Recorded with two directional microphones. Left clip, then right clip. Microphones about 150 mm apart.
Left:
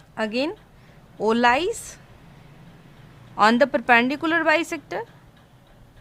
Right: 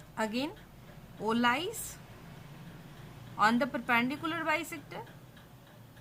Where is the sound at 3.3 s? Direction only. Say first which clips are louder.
Left 11 dB; 75° left (ahead or behind).